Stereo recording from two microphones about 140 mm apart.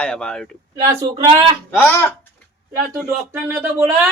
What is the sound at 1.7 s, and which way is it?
Speech, 15° left (ahead or behind).